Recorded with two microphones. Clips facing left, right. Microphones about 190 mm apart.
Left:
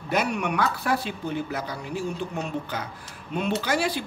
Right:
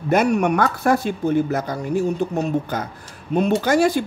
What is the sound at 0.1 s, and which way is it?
Speech, 45° right (ahead or behind).